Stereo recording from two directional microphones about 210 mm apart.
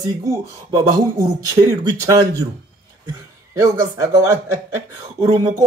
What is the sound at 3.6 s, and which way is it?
A man's voice, 15° right (ahead or behind).